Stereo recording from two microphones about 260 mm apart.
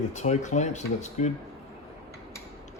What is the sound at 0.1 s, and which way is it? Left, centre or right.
Speech, left.